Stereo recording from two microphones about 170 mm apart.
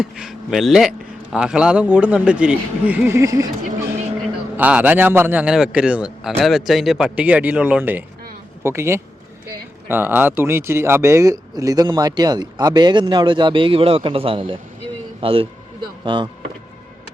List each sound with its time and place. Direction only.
0.0 s speech: 5° right (ahead or behind); by 3.5 s 20° right (ahead or behind)
4.5 s speech: 10° right (ahead or behind); by 14.6 s 30° right (ahead or behind)
15.2 s a sound: 35° right (ahead or behind)